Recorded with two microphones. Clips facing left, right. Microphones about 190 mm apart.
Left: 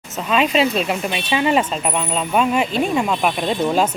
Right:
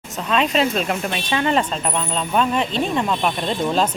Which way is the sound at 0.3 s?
5° left (ahead or behind).